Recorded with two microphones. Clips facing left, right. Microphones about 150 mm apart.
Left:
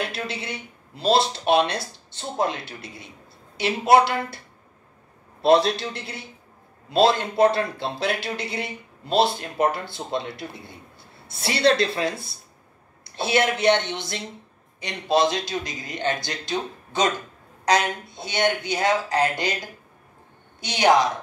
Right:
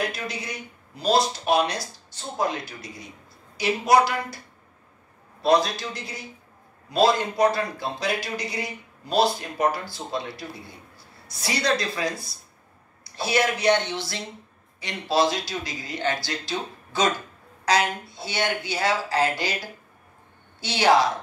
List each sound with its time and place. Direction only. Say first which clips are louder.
0.1 s speech: left 2 dB; 25° left (ahead or behind)
5.4 s a woman's voice: left 3 dB; 25° left (ahead or behind)